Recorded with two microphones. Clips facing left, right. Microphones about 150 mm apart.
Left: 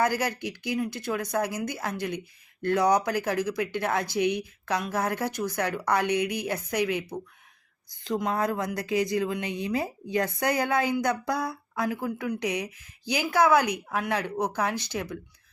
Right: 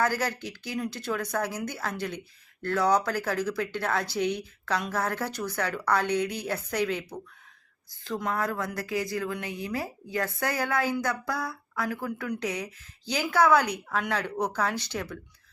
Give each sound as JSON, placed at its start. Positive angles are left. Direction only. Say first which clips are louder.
{"t": 0.0, "sound": "a woman's voice", "louder": "left 2 dB", "side_deg": 15}